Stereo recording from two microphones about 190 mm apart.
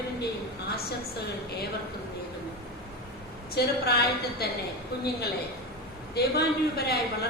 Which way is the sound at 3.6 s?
60° left (ahead or behind).